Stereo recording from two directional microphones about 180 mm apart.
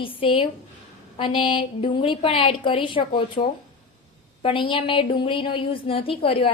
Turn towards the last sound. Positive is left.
turn(degrees=30)  # may be behind; listen again after turning